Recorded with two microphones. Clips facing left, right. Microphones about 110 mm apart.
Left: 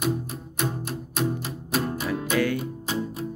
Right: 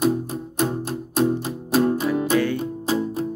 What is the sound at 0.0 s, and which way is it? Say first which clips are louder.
Music: right 6 dB; 30° right (ahead or behind).